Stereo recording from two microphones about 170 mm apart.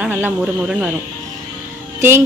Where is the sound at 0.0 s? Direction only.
10° right (ahead or behind).